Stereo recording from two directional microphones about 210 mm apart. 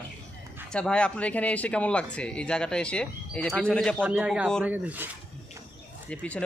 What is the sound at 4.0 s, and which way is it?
Speech, 10° right (ahead or behind).